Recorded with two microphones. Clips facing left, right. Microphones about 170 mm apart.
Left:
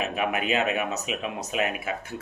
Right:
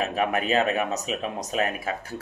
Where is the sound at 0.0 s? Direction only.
35° right (ahead or behind).